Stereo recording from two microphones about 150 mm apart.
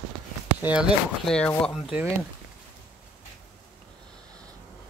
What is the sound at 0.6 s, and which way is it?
Speech, 5° right (ahead or behind).